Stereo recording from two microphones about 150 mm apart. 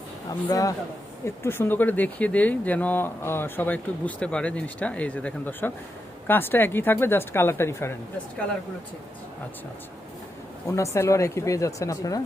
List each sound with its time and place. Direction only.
0.3 s speech: 25° left (ahead or behind)
10.9 s speech: 20° left (ahead or behind)